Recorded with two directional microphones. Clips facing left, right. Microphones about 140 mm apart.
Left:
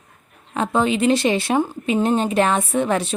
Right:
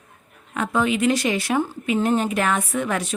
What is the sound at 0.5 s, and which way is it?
Speech, 30° left (ahead or behind).